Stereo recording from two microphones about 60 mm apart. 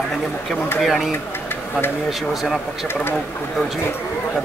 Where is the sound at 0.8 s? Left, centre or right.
Centre.